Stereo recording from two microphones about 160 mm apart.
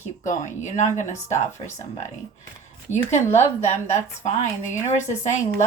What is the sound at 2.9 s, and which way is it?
Speech, 15° left (ahead or behind).